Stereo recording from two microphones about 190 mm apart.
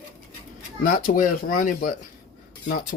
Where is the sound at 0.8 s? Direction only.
45° left (ahead or behind).